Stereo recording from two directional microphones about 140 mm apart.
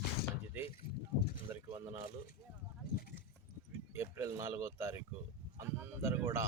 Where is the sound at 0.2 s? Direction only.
90° left.